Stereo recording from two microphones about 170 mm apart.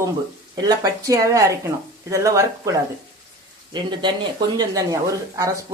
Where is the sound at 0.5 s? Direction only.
25° right (ahead or behind).